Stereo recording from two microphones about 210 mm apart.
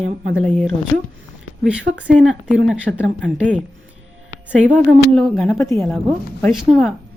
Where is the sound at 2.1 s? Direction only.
5° right (ahead or behind).